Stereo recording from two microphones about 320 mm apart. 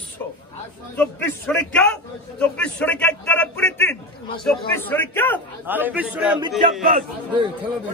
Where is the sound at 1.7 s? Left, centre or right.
Centre.